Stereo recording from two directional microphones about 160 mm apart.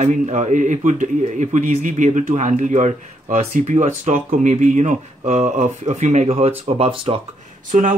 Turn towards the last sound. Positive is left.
turn(degrees=-55)  # may be behind; listen again after turning